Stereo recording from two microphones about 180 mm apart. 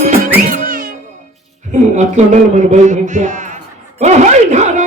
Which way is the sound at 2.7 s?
40° right (ahead or behind).